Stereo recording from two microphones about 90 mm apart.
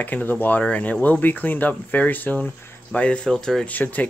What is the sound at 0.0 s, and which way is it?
Speech, 20° left (ahead or behind).